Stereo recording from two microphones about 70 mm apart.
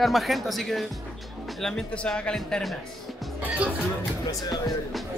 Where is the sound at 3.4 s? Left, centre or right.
Right.